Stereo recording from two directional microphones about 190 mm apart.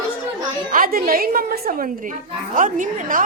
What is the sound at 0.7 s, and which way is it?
A woman's voice, 50° right (ahead or behind).